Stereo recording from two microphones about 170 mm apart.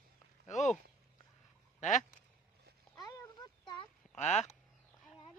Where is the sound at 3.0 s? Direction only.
25° left (ahead or behind).